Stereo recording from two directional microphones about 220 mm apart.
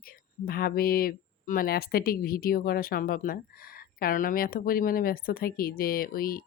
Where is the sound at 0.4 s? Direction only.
45° left (ahead or behind).